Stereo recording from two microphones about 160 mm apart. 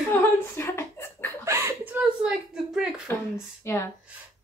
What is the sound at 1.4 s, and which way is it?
Chuckle, 15° right (ahead or behind).